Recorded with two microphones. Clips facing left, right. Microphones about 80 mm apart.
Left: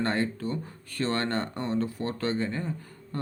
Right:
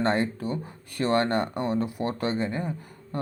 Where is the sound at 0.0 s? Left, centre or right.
Centre.